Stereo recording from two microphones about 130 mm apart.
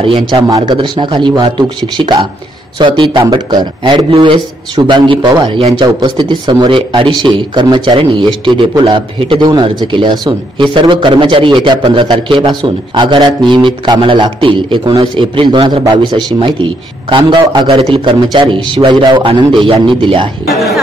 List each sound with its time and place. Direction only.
0.0 s a man's voice: 45° right (ahead or behind)
20.4 s speech: centre (ahead or behind)